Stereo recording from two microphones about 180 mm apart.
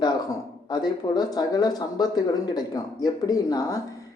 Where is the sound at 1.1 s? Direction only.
20° left (ahead or behind).